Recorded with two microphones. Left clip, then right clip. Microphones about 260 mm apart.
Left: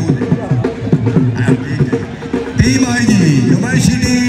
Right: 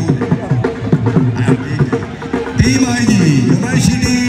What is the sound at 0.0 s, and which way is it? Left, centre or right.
Music, centre.